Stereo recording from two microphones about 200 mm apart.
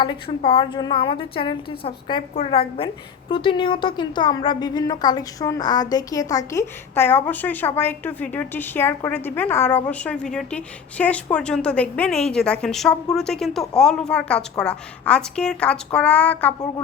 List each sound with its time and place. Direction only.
0.0 s a woman's voice: 25° left (ahead or behind); by 16.6 s 10° left (ahead or behind)